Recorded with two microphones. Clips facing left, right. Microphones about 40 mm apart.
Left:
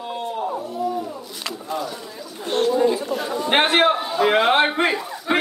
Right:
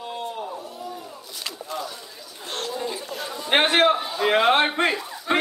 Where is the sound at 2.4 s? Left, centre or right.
Left; by 4.1 s centre.